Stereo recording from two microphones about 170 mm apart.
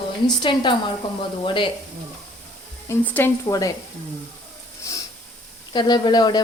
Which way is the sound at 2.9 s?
10° left (ahead or behind).